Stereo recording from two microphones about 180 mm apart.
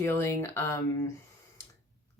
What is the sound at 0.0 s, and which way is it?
Speech, 15° left (ahead or behind).